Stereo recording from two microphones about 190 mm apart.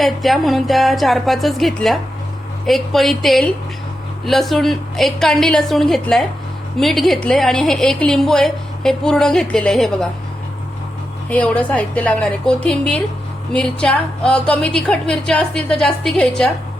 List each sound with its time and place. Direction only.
0.0 s a woman's voice: centre (ahead or behind)
11.3 s a woman's voice: 5° left (ahead or behind)